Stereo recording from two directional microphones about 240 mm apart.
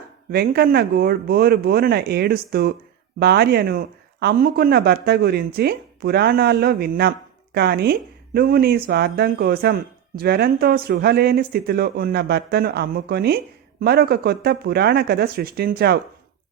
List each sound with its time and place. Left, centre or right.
0.3 s speech: right